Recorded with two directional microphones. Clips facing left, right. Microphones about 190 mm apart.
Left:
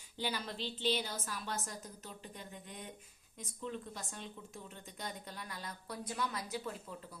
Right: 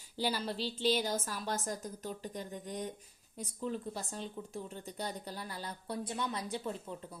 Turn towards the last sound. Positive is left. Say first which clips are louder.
# right 2 dB
turn(degrees=-30)  # may be behind; listen again after turning